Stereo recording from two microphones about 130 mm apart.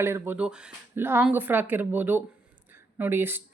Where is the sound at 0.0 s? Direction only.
15° right (ahead or behind).